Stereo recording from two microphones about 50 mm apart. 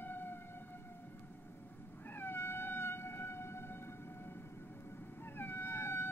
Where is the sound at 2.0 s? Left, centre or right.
Left.